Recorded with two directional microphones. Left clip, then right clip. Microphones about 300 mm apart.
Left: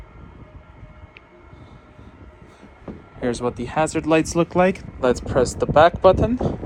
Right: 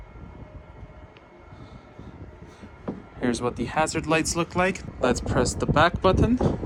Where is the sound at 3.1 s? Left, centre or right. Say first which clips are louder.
Left 3 dB; centre.